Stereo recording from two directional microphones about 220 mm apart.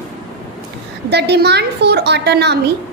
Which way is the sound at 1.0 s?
50° right (ahead or behind).